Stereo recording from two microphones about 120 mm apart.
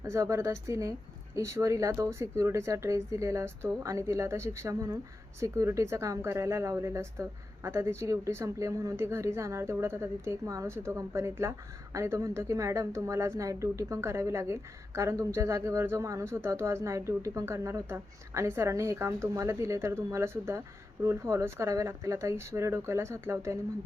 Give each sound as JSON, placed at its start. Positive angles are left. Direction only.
{"t": 0.0, "sound": "speech", "side_deg": -25}